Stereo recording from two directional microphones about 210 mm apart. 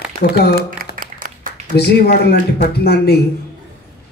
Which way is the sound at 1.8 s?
50° left (ahead or behind).